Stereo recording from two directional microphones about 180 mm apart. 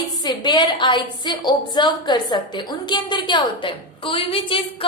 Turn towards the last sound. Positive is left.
turn(degrees=30)  # may be behind; listen again after turning